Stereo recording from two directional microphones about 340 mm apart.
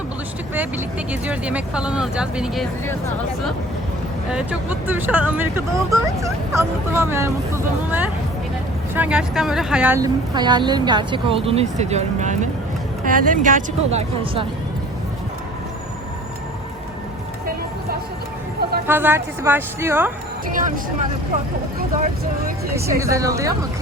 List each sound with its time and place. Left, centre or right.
1.1 s speech: centre
4.3 s speech: centre; by 14.4 s right
18.9 s speech: centre
20.5 s speech: right
22.7 s speech: centre